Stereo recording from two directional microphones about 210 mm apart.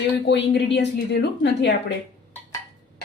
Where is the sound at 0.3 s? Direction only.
55° left (ahead or behind).